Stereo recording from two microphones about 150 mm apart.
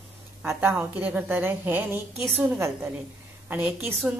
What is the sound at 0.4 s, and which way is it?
A woman's voice, 10° right (ahead or behind).